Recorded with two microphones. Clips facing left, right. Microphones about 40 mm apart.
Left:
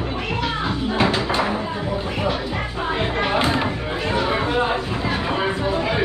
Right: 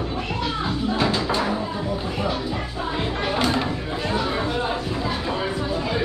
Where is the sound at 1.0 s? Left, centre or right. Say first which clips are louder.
Left 4 dB; left.